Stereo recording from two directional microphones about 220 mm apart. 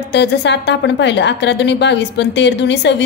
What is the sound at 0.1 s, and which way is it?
A woman's voice, 50° left (ahead or behind).